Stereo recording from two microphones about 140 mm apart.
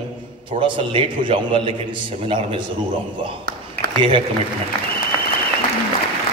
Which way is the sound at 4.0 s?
35° right (ahead or behind).